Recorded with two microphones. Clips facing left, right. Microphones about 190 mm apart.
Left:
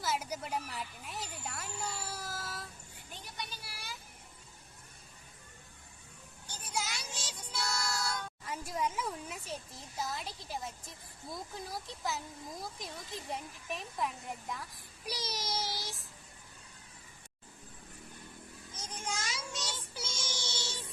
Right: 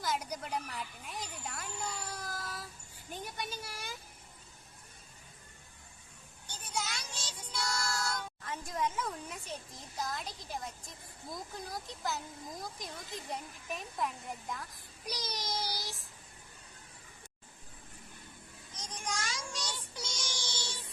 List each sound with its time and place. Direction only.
0.0 s speech: 5° left (ahead or behind)
3.1 s a sound: 50° right (ahead or behind)
6.5 s a sound: 10° left (ahead or behind)
7.4 s music: 10° left (ahead or behind)
8.4 s speech: 10° left (ahead or behind)
19.3 s child singing: 5° left (ahead or behind)
20.5 s music: 10° left (ahead or behind)